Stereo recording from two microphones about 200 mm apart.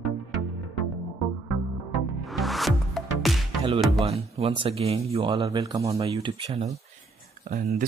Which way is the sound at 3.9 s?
30° right (ahead or behind).